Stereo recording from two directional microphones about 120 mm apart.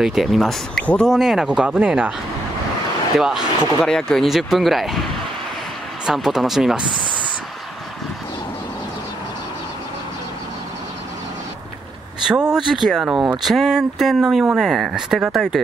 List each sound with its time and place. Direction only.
0.0 s speech: centre (ahead or behind)
1.1 s speech: 5° right (ahead or behind)
3.2 s speech: 5° right (ahead or behind)
6.0 s speech: centre (ahead or behind)
12.2 s speech: 5° right (ahead or behind)